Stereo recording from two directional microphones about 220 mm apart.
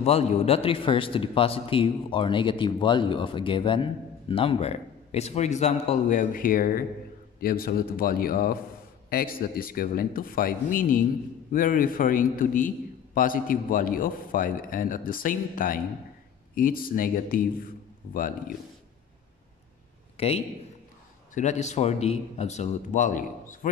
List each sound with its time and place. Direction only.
0.0 s a man's voice: 30° left (ahead or behind)
20.2 s a man's voice: 25° left (ahead or behind)